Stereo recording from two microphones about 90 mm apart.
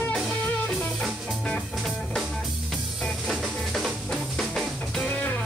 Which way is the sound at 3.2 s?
Centre (ahead or behind).